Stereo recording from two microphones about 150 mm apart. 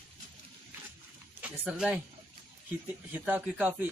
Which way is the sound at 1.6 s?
5° right (ahead or behind).